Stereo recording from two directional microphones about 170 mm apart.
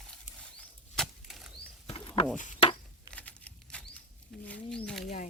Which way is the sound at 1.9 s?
35° left (ahead or behind).